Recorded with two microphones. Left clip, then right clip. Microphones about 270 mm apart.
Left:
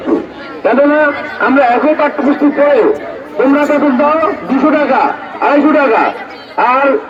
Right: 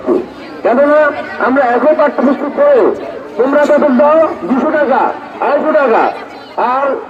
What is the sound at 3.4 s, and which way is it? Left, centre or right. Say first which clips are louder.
A man's voice: right 1 dB; right.